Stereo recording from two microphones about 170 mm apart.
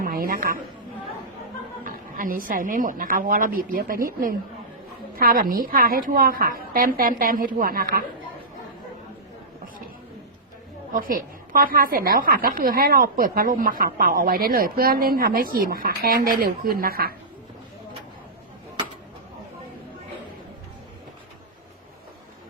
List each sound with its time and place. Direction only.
0.0 s chatter: 60° right (ahead or behind)
1.8 s a woman's voice: 55° right (ahead or behind)
10.9 s a woman's voice: 55° right (ahead or behind)